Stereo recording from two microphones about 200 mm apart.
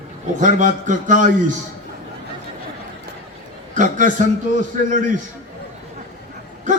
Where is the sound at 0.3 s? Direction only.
40° right (ahead or behind).